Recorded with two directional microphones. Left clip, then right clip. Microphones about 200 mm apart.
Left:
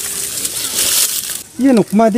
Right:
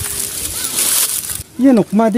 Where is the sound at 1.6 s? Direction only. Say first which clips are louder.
Left 1 dB; 15° right (ahead or behind).